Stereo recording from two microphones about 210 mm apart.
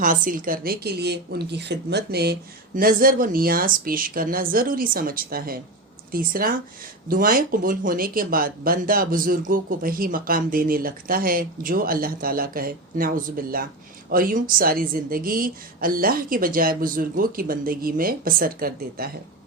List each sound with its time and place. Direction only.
0.0 s speech: 40° right (ahead or behind)